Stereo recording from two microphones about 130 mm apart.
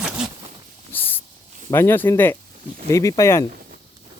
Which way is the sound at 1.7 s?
20° left (ahead or behind).